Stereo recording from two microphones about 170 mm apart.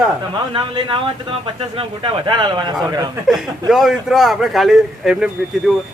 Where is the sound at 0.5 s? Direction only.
30° right (ahead or behind).